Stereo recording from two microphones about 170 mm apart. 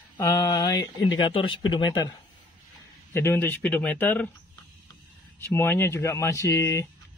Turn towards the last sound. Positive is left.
turn(degrees=15)  # may be behind; listen again after turning